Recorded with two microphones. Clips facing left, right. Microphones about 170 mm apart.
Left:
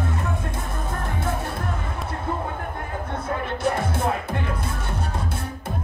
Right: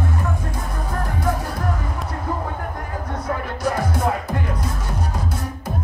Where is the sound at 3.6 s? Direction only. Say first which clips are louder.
Right 3 dB; 25° left (ahead or behind).